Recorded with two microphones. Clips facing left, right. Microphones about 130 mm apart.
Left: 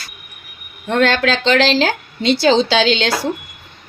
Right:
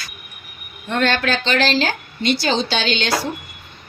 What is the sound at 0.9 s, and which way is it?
Speech, 90° left.